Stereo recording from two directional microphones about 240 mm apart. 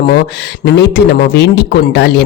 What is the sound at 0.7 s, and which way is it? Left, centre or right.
Speech, left.